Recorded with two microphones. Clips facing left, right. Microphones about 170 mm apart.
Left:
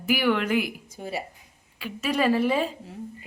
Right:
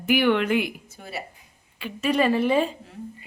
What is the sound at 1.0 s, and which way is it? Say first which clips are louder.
Speech: left 8 dB; 30° left (ahead or behind).